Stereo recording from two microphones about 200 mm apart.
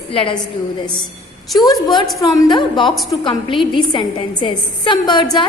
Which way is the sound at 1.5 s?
20° left (ahead or behind).